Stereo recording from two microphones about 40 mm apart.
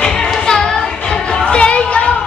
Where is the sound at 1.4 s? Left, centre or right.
Left.